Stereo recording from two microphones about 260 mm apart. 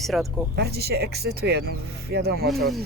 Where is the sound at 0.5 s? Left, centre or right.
Right.